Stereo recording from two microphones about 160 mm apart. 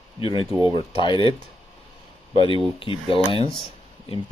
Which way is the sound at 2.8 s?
35° left (ahead or behind).